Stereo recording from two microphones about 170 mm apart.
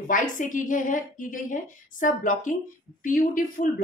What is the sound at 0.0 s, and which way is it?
A woman's voice, 50° left (ahead or behind).